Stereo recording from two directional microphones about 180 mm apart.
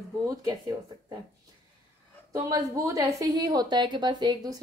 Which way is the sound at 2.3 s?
20° right (ahead or behind).